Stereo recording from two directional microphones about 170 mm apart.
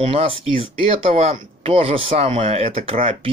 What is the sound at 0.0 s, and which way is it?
Speech, 35° right (ahead or behind).